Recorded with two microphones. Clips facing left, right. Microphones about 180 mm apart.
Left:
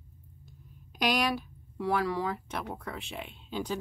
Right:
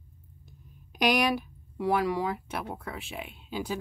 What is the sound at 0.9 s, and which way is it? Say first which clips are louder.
Speech: right 3 dB; 15° right (ahead or behind).